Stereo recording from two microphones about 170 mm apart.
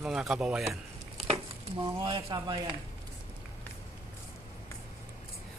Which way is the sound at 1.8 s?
30° right (ahead or behind).